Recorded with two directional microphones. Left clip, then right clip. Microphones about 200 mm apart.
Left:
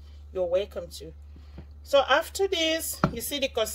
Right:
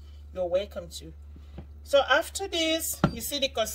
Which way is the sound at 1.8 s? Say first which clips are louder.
Left 1 dB; 40° left (ahead or behind).